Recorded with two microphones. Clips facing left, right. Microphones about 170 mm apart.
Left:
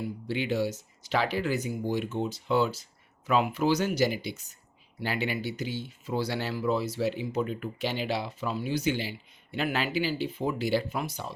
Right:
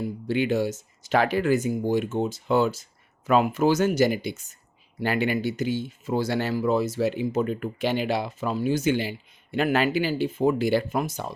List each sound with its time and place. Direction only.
0.0 s speech: 50° right (ahead or behind)